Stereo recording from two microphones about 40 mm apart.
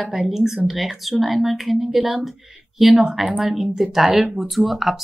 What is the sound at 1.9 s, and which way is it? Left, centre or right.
Speech, centre.